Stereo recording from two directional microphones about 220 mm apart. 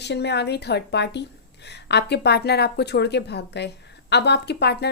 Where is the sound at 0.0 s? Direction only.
50° left (ahead or behind).